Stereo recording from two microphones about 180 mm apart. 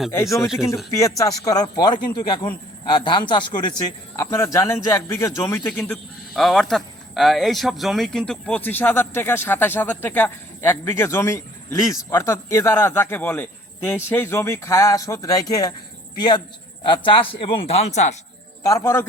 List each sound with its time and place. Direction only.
0.1 s speech: 15° left (ahead or behind)
4.2 s speech: 15° left (ahead or behind)
5.8 s speech: centre (ahead or behind); by 18.2 s 40° left (ahead or behind)
18.6 s speech: 15° left (ahead or behind)